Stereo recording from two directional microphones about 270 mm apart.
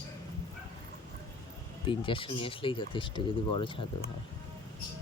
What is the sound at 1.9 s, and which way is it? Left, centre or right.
Speech, centre.